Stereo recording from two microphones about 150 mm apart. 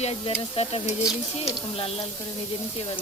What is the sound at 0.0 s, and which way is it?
Speech, 40° left (ahead or behind).